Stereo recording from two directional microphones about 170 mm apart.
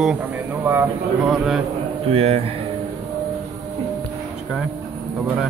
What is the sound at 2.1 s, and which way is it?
Speech, 35° right (ahead or behind).